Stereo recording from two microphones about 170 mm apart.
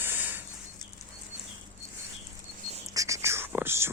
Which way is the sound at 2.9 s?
20° right (ahead or behind).